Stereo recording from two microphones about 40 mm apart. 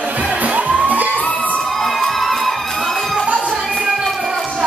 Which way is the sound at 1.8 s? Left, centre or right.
Centre.